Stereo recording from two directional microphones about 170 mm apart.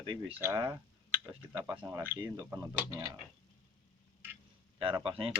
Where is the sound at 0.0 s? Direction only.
30° right (ahead or behind).